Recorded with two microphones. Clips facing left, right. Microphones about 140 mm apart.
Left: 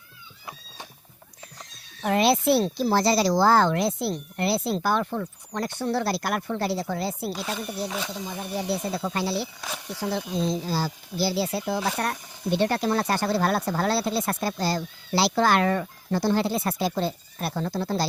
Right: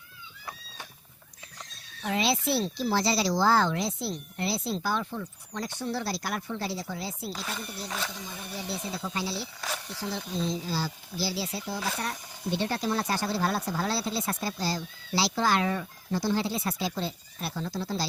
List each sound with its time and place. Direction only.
2.0 s speech: 55° left (ahead or behind)
7.9 s speech: 15° left (ahead or behind)
8.3 s speech: 60° left (ahead or behind)
9.6 s speech: 10° left (ahead or behind)
10.0 s speech: 60° left (ahead or behind)
10.5 s speech: 45° left (ahead or behind)